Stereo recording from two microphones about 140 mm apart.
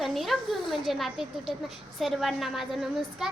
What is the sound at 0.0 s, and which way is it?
A woman's voice, centre (ahead or behind).